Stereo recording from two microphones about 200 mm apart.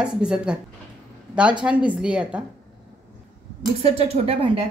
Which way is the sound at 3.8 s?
30° right (ahead or behind).